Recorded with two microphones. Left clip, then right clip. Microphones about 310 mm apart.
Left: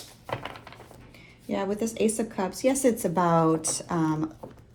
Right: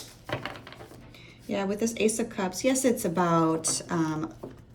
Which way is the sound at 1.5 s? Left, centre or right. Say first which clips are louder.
Even; centre.